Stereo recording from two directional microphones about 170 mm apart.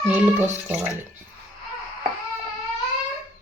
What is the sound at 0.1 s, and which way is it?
Speech, 10° right (ahead or behind).